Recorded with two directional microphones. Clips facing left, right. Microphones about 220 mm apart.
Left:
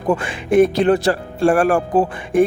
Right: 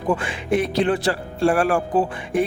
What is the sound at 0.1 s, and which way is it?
Speech, 45° left (ahead or behind).